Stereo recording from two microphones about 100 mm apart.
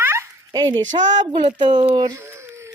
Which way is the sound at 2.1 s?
25° right (ahead or behind).